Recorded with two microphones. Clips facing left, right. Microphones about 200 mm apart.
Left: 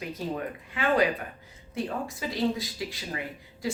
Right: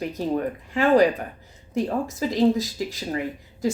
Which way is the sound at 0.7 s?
40° right (ahead or behind).